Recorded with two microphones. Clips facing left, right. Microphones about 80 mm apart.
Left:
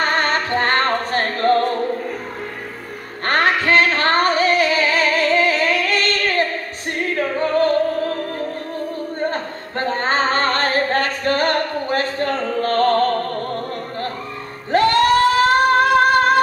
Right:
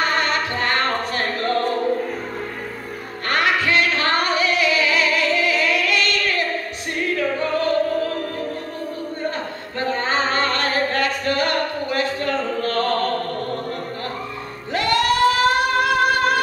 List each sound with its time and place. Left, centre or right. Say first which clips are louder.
0.0 s music: left 2 dB; left
3.3 s music: left 3 dB; left
9.3 s singing: left 2 dB; left
14.7 s a sound: left 5 dB; left